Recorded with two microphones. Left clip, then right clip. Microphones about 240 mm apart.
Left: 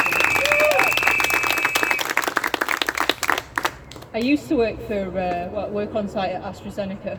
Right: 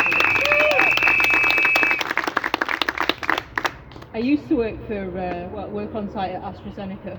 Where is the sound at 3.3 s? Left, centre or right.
Right.